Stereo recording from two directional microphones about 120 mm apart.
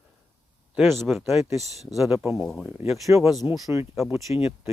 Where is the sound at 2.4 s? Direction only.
Centre (ahead or behind).